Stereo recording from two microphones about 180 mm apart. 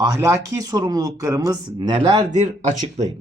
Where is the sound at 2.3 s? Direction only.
40° right (ahead or behind).